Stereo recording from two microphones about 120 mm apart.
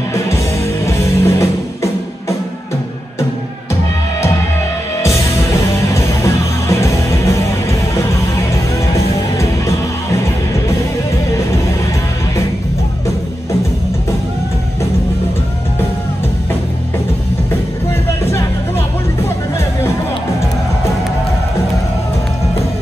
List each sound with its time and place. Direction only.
0.8 s music: 25° left (ahead or behind)
5.0 s music: 25° left (ahead or behind)
18.2 s music: 20° left (ahead or behind)